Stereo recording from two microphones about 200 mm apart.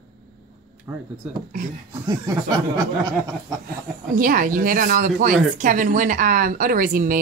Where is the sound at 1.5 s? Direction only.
40° right (ahead or behind).